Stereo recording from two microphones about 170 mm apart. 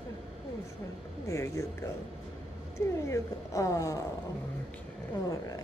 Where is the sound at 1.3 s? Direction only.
15° left (ahead or behind).